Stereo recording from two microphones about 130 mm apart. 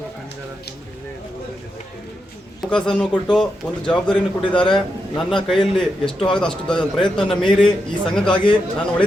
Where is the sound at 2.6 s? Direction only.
5° left (ahead or behind).